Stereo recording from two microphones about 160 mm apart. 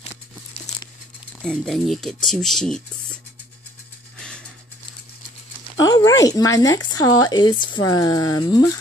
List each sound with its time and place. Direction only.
1.4 s speech: 5° left (ahead or behind)
5.8 s speech: 25° left (ahead or behind)